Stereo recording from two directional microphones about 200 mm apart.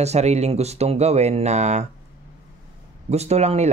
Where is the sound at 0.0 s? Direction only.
35° right (ahead or behind).